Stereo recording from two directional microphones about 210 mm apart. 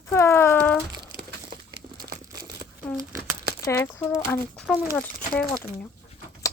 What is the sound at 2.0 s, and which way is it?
Crumpling, 45° right (ahead or behind).